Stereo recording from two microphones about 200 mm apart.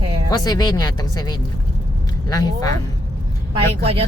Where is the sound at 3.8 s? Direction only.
30° right (ahead or behind).